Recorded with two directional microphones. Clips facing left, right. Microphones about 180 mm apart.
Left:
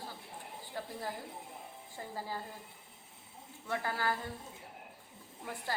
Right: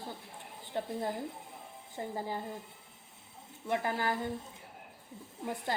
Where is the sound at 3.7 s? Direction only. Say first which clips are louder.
Right 3 dB; 20° right (ahead or behind).